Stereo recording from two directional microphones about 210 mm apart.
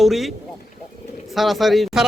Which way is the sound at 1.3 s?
Centre (ahead or behind).